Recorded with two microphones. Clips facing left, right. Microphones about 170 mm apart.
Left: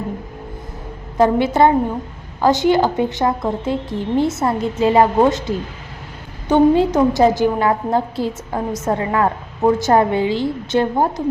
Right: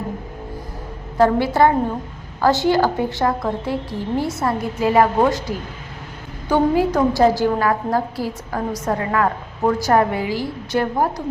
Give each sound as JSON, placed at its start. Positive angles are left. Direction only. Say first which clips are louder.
{"t": 1.2, "sound": "a woman's voice", "louder": "left 1 dB", "side_deg": 20}